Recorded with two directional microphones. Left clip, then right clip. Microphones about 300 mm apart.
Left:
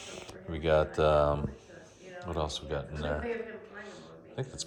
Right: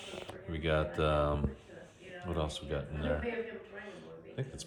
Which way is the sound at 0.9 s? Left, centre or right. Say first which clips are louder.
Left 6 dB; left.